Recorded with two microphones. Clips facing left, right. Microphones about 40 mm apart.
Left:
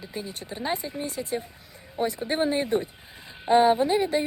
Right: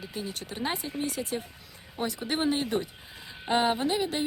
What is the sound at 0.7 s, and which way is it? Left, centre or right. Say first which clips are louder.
Speech: left 4 dB; right.